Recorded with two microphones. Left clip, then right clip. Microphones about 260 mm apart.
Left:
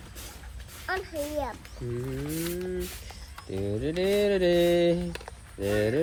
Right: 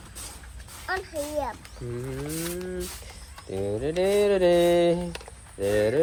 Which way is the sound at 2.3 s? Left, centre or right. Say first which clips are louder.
Left 1 dB; right.